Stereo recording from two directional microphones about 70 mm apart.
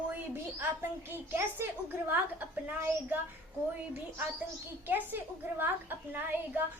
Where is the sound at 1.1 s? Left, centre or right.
Right.